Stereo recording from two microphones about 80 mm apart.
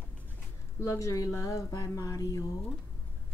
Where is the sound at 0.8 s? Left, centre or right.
Left.